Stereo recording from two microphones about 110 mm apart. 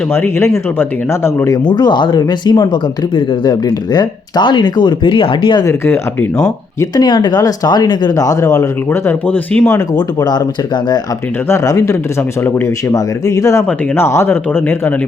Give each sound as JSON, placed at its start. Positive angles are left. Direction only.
{"t": 0.1, "sound": "speech", "side_deg": 20}
{"t": 1.5, "sound": "speech", "side_deg": 40}
{"t": 5.6, "sound": "speech", "side_deg": 20}
{"t": 6.7, "sound": "speech", "side_deg": 40}
{"t": 9.9, "sound": "speech", "side_deg": 40}
{"t": 11.4, "sound": "speech", "side_deg": 30}
{"t": 12.9, "sound": "speech", "side_deg": 30}